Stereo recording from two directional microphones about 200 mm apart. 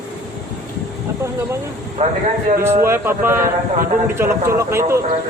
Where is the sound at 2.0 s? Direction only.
35° right (ahead or behind).